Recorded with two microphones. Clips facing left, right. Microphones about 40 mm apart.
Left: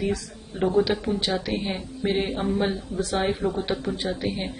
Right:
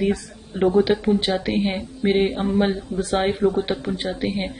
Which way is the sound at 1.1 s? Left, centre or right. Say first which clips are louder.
Right 5 dB; right.